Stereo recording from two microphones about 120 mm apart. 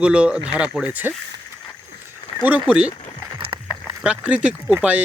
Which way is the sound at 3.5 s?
40° right (ahead or behind).